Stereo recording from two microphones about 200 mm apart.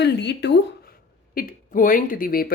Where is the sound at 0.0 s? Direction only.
60° left (ahead or behind).